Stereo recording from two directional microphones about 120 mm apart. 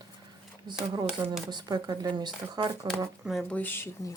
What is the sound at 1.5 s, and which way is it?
Speech, 35° right (ahead or behind).